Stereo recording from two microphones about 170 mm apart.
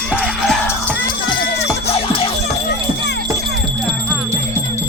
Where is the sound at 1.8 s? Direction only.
35° left (ahead or behind).